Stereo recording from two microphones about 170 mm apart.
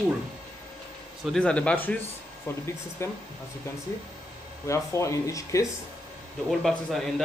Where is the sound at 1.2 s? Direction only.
5° left (ahead or behind).